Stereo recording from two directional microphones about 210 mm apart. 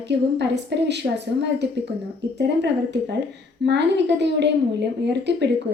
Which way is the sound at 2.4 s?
55° right (ahead or behind).